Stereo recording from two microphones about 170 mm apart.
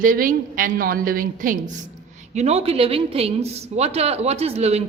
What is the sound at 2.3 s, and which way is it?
A woman's voice, 40° right (ahead or behind).